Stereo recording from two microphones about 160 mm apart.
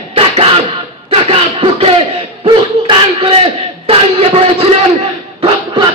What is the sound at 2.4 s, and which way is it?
Battle cry, 30° right (ahead or behind).